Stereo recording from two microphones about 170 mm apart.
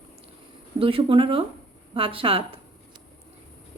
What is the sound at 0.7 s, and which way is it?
A woman's voice, 30° right (ahead or behind).